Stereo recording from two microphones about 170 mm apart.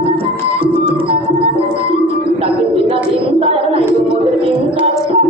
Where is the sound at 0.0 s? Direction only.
30° right (ahead or behind).